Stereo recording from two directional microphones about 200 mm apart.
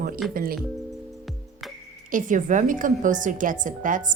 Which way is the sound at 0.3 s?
45° right (ahead or behind).